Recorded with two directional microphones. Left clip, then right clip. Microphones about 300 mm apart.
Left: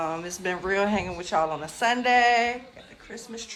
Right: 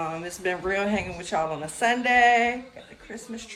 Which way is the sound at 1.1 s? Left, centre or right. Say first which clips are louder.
Left 2 dB; left.